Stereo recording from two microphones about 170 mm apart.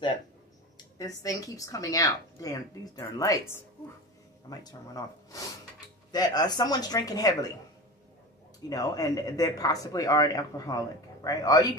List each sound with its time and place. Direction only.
0.9 s speech: 20° left (ahead or behind)
8.6 s speech: 20° left (ahead or behind)